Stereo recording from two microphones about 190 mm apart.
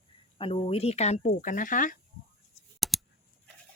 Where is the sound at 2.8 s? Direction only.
Centre (ahead or behind).